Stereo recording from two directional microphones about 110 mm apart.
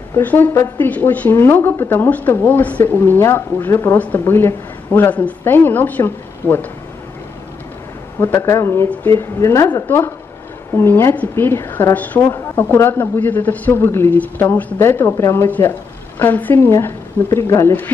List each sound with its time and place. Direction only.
0.1 s a woman's voice: 15° left (ahead or behind)
8.2 s a woman's voice: 20° left (ahead or behind)